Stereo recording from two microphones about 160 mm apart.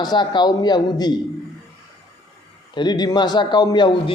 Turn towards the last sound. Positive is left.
turn(degrees=30)  # may be behind; listen again after turning